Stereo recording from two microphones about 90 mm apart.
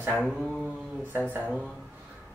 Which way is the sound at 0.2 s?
Centre (ahead or behind).